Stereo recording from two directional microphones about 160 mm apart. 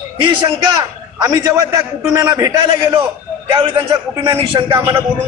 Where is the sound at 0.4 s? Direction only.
20° right (ahead or behind).